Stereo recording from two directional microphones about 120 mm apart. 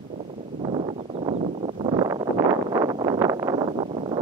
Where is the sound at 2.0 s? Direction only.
40° right (ahead or behind).